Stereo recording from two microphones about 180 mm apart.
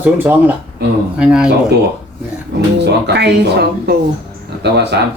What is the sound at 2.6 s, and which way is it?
Speech, 70° right (ahead or behind).